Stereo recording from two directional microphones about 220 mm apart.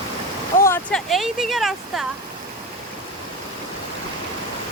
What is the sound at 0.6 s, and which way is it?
Speech, 10° left (ahead or behind).